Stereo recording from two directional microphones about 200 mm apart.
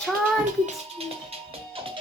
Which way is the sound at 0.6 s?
30° right (ahead or behind).